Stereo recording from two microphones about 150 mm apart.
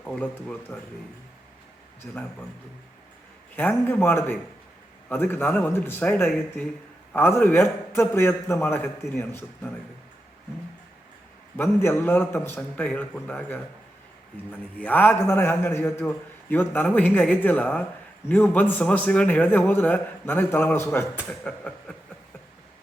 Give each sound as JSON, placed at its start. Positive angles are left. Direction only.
{"t": 0.0, "sound": "a man's voice", "side_deg": 10}
{"t": 3.5, "sound": "a man's voice", "side_deg": 10}
{"t": 11.5, "sound": "a man's voice", "side_deg": 15}
{"t": 14.8, "sound": "a man's voice", "side_deg": 10}
{"t": 21.2, "sound": "a sound", "side_deg": 5}